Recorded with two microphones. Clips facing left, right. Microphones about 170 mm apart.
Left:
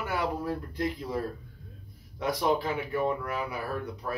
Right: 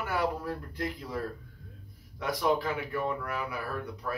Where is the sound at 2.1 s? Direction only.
25° left (ahead or behind).